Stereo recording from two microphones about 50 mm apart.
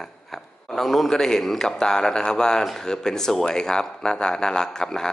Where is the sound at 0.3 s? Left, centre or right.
Centre.